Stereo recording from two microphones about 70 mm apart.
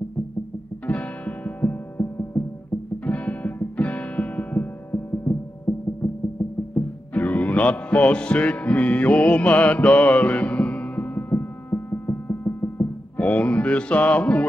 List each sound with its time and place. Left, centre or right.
0.9 s music: left
7.2 s music: centre; by 12.8 s left
13.2 s music: centre